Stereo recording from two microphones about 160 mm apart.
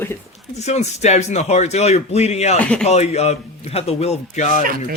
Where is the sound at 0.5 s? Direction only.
45° left (ahead or behind).